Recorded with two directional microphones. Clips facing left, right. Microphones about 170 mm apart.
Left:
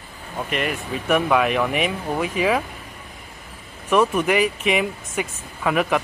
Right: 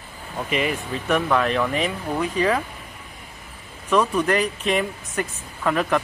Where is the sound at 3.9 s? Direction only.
10° left (ahead or behind).